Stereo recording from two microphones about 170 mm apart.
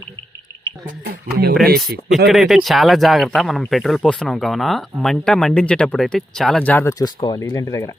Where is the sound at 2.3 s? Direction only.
Centre (ahead or behind); by 7.9 s 15° left (ahead or behind).